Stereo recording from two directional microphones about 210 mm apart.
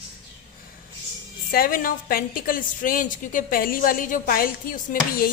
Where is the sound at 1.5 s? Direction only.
45° left (ahead or behind).